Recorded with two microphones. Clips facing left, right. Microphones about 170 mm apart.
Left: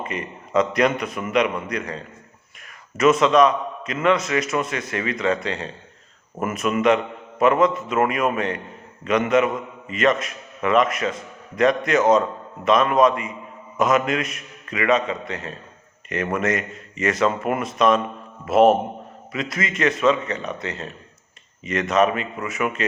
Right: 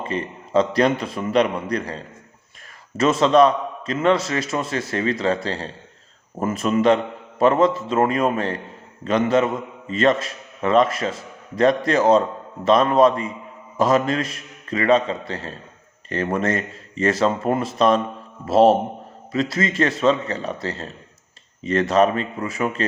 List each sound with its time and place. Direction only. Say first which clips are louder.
0.0 s a man's voice: right 3 dB; 30° right (ahead or behind)
3.0 s a man's voice: even; 30° right (ahead or behind)